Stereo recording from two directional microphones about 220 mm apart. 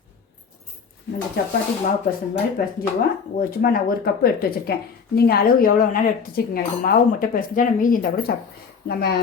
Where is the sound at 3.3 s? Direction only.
45° left (ahead or behind).